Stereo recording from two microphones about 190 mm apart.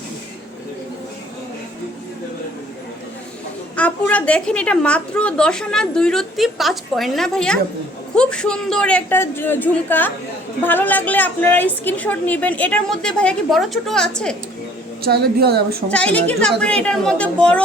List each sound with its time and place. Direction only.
3.8 s a woman's voice: 5° left (ahead or behind)
15.0 s a woman's voice: 55° right (ahead or behind)
15.9 s a woman's voice: 5° left (ahead or behind)